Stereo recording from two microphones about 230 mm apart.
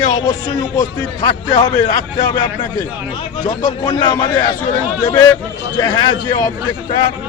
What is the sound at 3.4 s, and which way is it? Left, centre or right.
A man's voice, centre.